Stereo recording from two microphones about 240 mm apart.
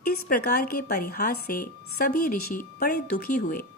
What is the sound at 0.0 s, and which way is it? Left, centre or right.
A woman's voice, left.